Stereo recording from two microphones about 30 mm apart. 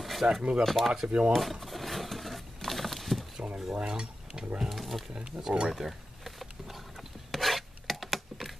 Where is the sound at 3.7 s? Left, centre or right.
Right.